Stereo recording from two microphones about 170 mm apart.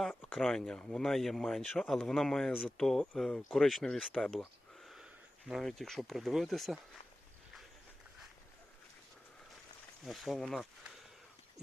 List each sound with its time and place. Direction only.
0.0 s speech: 5° left (ahead or behind)
10.0 s speech: centre (ahead or behind)